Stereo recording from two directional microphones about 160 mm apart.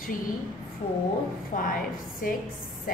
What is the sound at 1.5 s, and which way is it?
Speech, 60° left (ahead or behind).